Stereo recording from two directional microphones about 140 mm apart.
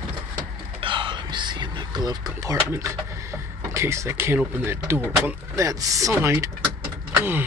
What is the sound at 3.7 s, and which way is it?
Speech, 20° right (ahead or behind).